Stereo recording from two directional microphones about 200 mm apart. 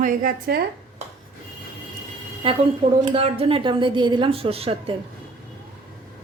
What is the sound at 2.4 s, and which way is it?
A woman's voice, 30° right (ahead or behind).